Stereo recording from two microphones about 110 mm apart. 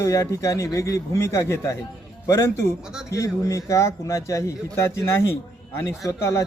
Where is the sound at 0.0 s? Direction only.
30° left (ahead or behind).